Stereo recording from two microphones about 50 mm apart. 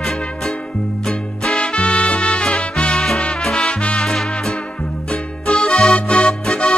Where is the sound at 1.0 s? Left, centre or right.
Centre.